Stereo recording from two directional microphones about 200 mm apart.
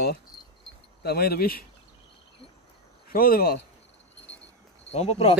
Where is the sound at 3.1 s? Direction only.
45° left (ahead or behind).